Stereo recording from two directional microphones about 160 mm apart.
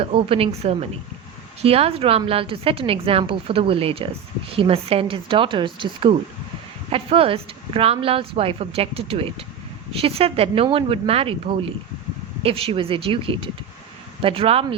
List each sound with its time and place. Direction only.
0.0 s a woman's voice: 35° right (ahead or behind)